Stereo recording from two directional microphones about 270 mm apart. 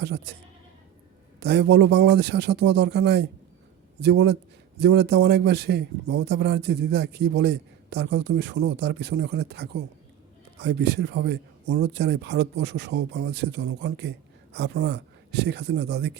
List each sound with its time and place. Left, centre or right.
0.0 s speech: right
1.4 s speech: right